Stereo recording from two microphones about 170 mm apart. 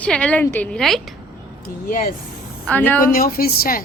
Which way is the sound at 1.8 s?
55° left (ahead or behind).